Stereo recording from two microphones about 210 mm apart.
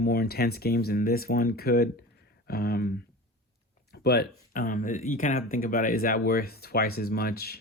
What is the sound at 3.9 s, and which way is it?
Speech, 50° left (ahead or behind).